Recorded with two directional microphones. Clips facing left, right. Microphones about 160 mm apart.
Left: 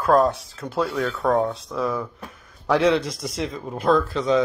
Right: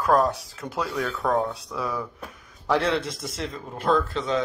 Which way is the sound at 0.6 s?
15° left (ahead or behind).